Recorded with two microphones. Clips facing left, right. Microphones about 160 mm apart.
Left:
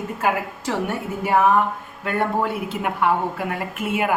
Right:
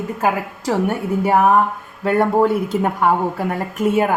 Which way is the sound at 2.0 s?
40° right (ahead or behind).